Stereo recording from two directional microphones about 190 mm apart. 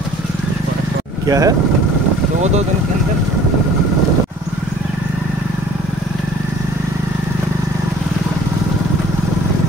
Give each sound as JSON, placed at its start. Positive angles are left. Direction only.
{"t": 1.2, "sound": "speech", "side_deg": -20}